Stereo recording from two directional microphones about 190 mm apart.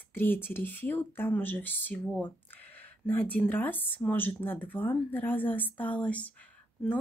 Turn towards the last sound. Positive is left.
turn(degrees=10)  # may be behind; listen again after turning